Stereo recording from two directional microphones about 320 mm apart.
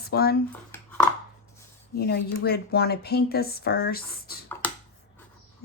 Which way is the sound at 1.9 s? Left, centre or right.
Left.